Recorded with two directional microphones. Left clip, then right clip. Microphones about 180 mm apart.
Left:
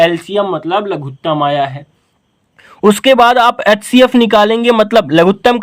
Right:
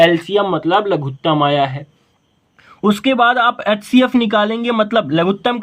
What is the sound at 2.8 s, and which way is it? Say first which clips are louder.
Speech: left 7 dB; 45° left (ahead or behind).